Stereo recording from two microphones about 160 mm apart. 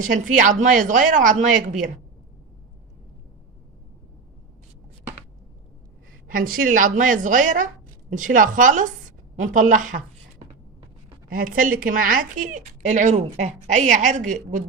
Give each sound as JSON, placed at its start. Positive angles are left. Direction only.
{"t": 0.0, "sound": "a woman's voice", "side_deg": -55}
{"t": 6.2, "sound": "a woman's voice", "side_deg": -65}
{"t": 11.3, "sound": "a woman's voice", "side_deg": -60}